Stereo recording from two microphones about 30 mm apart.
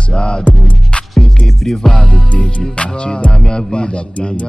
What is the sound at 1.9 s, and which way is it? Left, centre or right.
Speech, left.